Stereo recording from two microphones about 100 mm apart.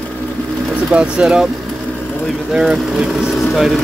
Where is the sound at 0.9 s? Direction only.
10° right (ahead or behind).